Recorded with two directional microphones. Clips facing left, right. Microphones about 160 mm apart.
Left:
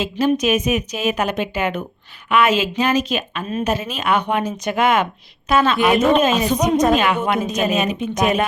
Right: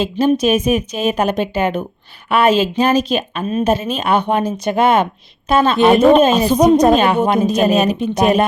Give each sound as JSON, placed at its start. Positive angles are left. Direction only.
{"t": 0.0, "sound": "a woman's voice", "side_deg": -30}